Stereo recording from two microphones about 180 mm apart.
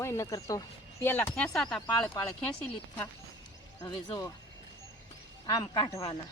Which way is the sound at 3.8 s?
20° left (ahead or behind).